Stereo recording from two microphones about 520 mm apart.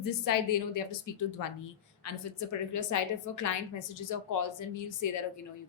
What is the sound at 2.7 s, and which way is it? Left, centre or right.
Speech, left.